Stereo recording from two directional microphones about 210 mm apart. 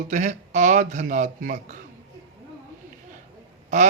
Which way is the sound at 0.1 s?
35° right (ahead or behind).